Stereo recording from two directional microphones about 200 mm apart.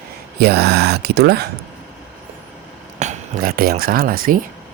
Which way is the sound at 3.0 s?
40° right (ahead or behind).